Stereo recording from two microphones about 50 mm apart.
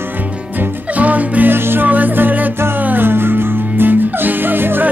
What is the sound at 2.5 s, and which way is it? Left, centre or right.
Music, right.